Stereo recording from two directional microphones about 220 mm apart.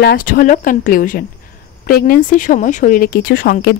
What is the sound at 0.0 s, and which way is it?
Speech, 40° left (ahead or behind).